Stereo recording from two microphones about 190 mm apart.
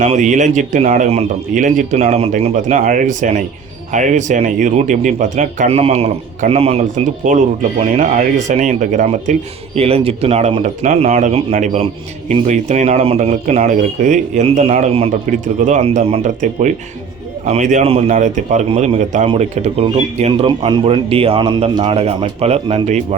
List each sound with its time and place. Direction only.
0.0 s speech: 35° right (ahead or behind)
7.2 s speech: 45° right (ahead or behind)
9.7 s speech: 30° right (ahead or behind)